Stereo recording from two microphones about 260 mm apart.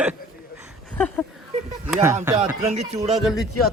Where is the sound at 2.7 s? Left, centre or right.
Right.